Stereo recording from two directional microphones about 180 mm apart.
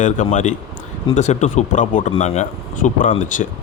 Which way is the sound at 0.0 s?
45° left (ahead or behind).